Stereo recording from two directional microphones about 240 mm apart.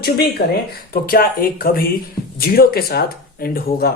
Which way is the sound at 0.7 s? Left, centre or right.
Left.